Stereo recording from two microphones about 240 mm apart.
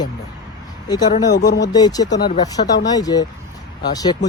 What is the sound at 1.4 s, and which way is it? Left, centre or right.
Speech, left.